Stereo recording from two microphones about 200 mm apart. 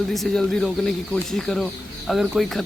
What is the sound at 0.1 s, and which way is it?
Speech, centre (ahead or behind).